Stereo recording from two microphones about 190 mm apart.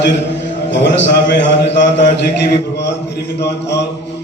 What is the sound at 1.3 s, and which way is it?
Mantra, 65° left (ahead or behind).